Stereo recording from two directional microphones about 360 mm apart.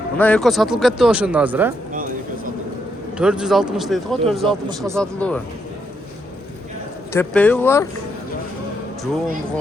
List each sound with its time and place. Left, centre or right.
0.2 s speech: centre
1.9 s a sound: right
3.2 s speech: centre
7.1 s speech: centre